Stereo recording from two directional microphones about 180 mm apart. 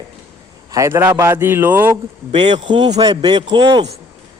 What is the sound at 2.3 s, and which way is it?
A man's voice, 25° right (ahead or behind).